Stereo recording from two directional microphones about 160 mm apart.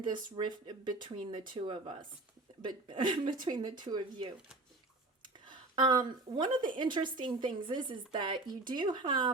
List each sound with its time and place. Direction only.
0.0 s a woman's voice: 30° right (ahead or behind)
5.5 s a woman's voice: 30° right (ahead or behind)